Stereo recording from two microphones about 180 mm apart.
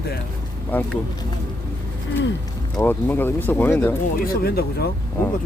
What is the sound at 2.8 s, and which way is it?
Speech, 10° left (ahead or behind).